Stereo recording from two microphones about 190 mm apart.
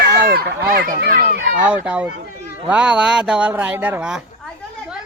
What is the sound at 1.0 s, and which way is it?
Children playing, 60° right (ahead or behind).